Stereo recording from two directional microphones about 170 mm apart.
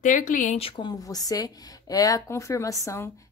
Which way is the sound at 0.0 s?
50° left (ahead or behind).